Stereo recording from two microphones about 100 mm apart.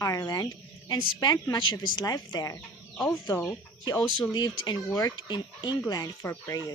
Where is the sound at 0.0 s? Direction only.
35° left (ahead or behind).